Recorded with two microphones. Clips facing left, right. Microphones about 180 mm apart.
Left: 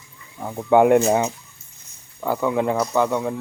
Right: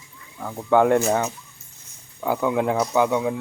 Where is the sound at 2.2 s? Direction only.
Centre (ahead or behind).